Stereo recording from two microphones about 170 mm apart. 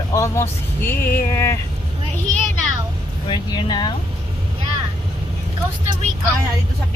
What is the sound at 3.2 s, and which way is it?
Speech, 25° left (ahead or behind).